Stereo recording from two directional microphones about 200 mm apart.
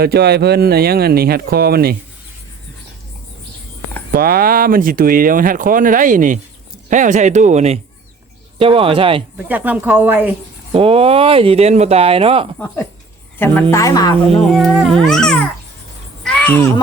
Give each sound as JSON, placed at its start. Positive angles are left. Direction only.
{"t": 0.0, "sound": "speech", "side_deg": -55}
{"t": 4.1, "sound": "speech", "side_deg": -50}
{"t": 9.5, "sound": "a woman's voice", "side_deg": -10}
{"t": 10.7, "sound": "speech", "side_deg": -30}
{"t": 12.5, "sound": "a woman's voice", "side_deg": 10}
{"t": 14.3, "sound": "speech", "side_deg": 0}
{"t": 16.2, "sound": "a sound", "side_deg": 5}